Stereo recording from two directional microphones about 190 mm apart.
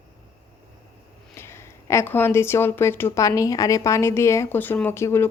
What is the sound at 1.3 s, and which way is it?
Speech, 15° left (ahead or behind).